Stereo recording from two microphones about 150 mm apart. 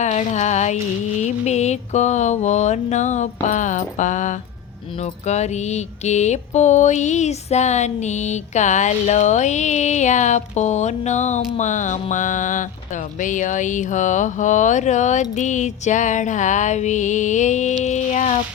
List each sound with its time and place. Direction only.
0.0 s mantra: 50° left (ahead or behind)
13.1 s music: 60° left (ahead or behind)